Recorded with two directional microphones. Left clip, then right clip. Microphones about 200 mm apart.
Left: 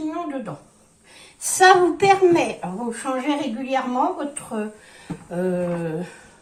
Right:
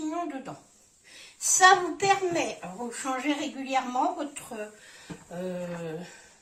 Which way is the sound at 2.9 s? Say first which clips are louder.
Left 5 dB; 25° right (ahead or behind).